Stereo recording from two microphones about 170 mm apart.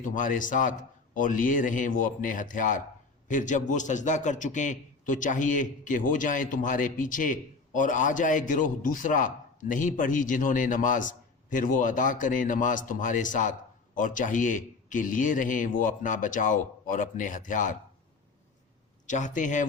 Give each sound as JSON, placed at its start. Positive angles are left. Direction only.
{"t": 0.0, "sound": "a man's voice", "side_deg": 50}
{"t": 19.0, "sound": "a man's voice", "side_deg": 45}